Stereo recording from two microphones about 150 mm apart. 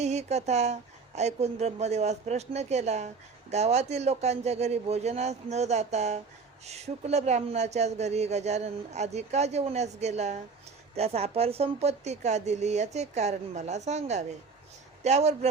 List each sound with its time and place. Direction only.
0.0 s speech: 50° right (ahead or behind)